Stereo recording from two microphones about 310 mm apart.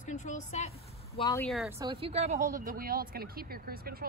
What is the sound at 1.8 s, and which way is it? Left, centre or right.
Speech, centre.